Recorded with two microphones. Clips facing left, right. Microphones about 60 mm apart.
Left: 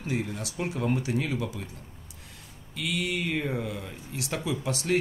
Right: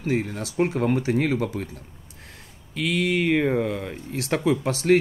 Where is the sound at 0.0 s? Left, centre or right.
Right.